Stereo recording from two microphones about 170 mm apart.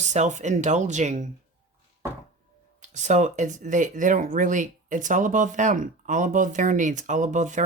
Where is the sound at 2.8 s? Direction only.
45° right (ahead or behind).